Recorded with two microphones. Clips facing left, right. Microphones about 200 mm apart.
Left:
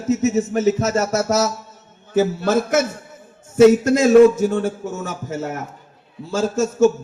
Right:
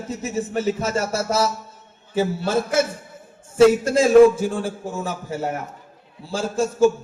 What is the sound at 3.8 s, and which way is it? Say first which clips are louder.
Music: left 1 dB; 30° right (ahead or behind).